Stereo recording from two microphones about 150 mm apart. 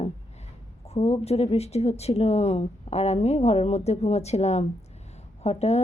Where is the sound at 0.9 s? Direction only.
45° left (ahead or behind).